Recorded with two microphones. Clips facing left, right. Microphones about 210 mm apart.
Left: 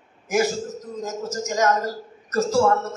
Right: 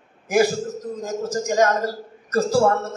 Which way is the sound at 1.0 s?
35° right (ahead or behind).